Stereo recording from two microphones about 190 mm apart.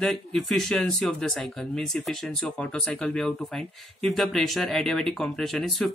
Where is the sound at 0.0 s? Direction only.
Centre (ahead or behind).